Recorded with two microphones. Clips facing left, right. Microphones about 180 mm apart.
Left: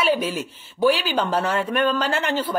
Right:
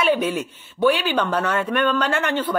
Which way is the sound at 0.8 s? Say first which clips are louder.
Right 1 dB; 30° left (ahead or behind).